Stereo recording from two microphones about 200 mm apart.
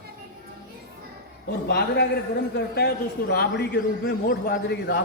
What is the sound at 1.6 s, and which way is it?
A man's voice, 55° left (ahead or behind).